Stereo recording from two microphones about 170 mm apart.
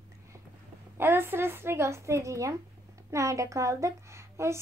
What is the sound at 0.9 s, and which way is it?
Speech, 15° right (ahead or behind).